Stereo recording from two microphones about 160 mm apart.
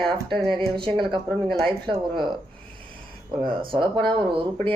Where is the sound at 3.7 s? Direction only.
30° right (ahead or behind).